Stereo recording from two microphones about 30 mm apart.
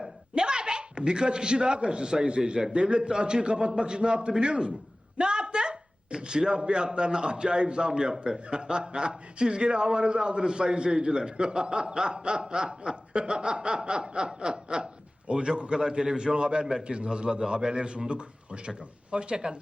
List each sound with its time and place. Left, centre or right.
0.3 s a man's voice: right